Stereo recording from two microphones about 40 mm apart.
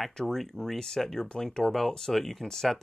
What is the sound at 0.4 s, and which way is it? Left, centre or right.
Speech, centre.